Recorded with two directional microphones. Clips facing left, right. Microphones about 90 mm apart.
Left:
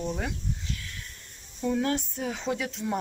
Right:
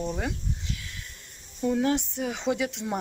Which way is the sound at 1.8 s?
20° right (ahead or behind).